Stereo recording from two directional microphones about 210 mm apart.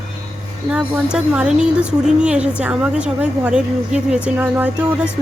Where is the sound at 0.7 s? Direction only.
5° right (ahead or behind).